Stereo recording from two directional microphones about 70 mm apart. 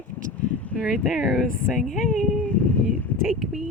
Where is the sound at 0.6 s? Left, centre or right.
Centre.